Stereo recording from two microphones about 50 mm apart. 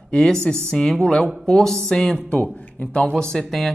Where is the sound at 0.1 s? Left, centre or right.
Centre.